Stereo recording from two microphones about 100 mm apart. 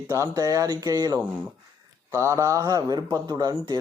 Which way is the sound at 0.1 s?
35° right (ahead or behind).